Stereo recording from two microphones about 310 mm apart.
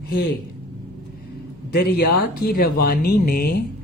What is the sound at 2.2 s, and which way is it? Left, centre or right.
Speech, left.